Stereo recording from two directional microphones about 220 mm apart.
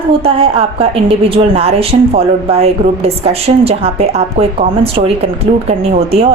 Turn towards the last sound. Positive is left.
turn(degrees=-30)  # may be behind; listen again after turning